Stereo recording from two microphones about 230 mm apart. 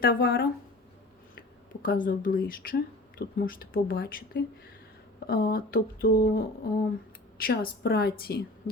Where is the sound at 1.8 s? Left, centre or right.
Left.